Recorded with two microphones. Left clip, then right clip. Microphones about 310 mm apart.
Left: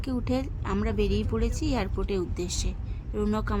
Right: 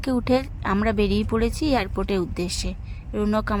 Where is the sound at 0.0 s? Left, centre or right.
Centre.